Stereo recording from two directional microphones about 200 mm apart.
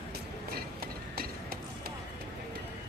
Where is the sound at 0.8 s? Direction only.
50° right (ahead or behind).